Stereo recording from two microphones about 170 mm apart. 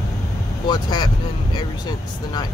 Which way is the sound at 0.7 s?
25° left (ahead or behind).